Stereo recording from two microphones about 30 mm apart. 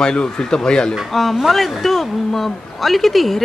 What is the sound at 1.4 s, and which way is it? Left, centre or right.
A man's voice, centre.